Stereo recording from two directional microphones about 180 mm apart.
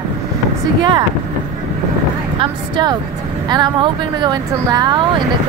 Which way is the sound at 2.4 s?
25° right (ahead or behind).